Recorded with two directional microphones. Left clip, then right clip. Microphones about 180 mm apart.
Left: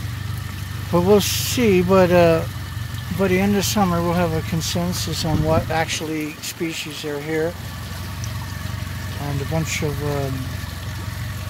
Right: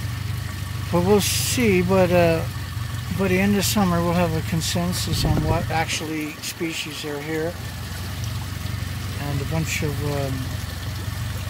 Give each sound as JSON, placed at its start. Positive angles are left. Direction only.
{"t": 0.9, "sound": "speech", "side_deg": 15}
{"t": 3.6, "sound": "speech", "side_deg": 0}
{"t": 9.5, "sound": "speech", "side_deg": 10}